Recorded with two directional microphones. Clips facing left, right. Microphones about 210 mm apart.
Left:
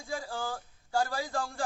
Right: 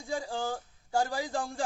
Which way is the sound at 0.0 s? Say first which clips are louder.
Right 3 dB; 20° right (ahead or behind).